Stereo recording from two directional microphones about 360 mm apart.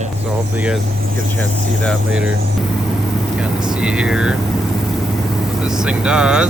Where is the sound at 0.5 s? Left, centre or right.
Centre.